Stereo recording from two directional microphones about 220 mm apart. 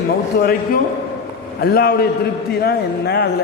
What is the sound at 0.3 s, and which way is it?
A man's voice, 45° left (ahead or behind).